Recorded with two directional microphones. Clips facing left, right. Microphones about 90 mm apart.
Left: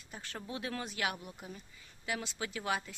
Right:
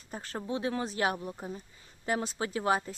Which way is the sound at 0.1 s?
40° right (ahead or behind).